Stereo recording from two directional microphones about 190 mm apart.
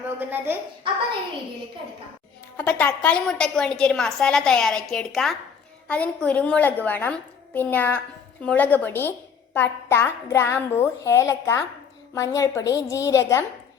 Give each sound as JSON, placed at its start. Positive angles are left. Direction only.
{"t": 0.2, "sound": "speech", "side_deg": -10}
{"t": 2.6, "sound": "a woman's voice", "side_deg": 10}